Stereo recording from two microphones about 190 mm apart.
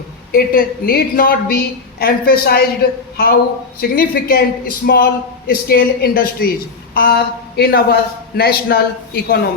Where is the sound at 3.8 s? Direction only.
50° left (ahead or behind).